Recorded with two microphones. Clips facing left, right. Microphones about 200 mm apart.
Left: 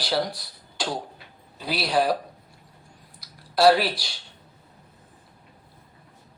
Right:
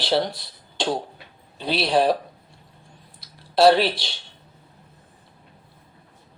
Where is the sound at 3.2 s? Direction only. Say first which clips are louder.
Right 3 dB; 25° right (ahead or behind).